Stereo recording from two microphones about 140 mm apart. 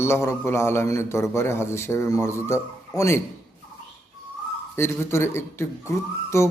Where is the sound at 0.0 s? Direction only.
20° left (ahead or behind).